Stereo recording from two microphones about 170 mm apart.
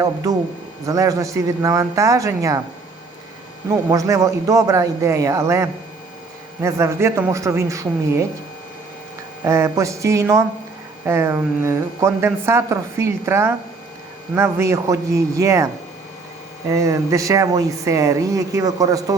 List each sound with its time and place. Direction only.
0.9 s speech: 20° right (ahead or behind)
3.8 s speech: 20° right (ahead or behind)
9.4 s speech: 15° right (ahead or behind)